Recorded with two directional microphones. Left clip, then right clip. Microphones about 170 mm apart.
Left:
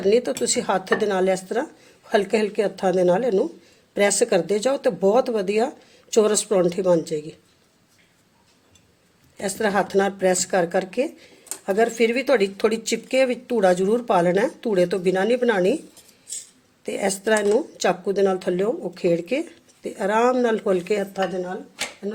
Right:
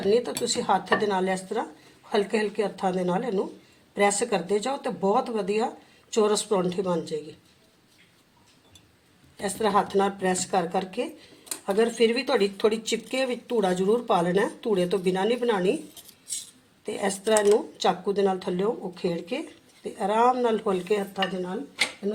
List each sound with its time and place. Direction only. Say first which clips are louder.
0.1 s speech: left 4 dB; 65° left (ahead or behind)
9.4 s speech: left 2 dB; 70° left (ahead or behind)
16.8 s speech: left 4 dB; 65° left (ahead or behind)